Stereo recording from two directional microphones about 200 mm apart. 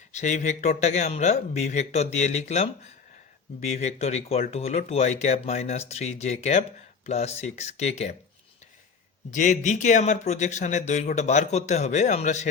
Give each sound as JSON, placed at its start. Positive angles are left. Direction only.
{"t": 0.1, "sound": "speech", "side_deg": 35}
{"t": 9.3, "sound": "speech", "side_deg": 40}